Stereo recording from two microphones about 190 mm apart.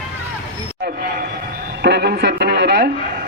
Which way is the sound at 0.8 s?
50° right (ahead or behind).